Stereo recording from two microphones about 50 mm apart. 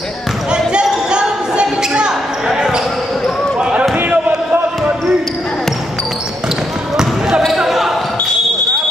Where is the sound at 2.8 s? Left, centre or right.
Centre.